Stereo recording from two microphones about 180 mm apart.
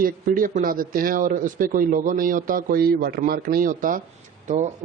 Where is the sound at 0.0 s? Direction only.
50° right (ahead or behind).